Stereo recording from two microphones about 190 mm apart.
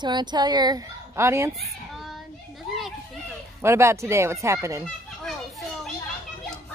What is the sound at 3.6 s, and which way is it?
Speech, 15° right (ahead or behind).